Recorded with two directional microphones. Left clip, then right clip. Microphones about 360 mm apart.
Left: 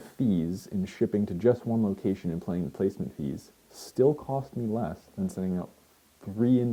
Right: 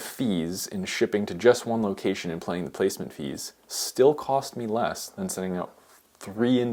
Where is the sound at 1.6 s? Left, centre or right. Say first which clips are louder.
Right 3 dB; centre.